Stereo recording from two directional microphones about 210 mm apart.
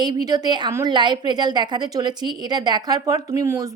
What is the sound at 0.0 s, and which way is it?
A woman's voice, 20° right (ahead or behind).